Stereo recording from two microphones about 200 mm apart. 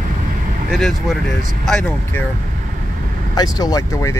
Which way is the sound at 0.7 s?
Centre (ahead or behind).